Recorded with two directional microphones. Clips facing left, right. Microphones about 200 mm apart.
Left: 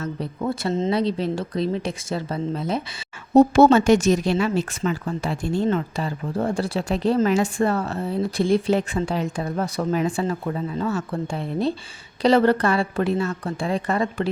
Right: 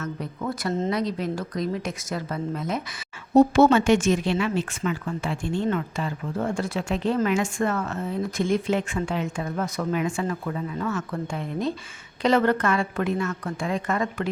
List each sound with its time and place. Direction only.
0.0 s speech: 30° left (ahead or behind)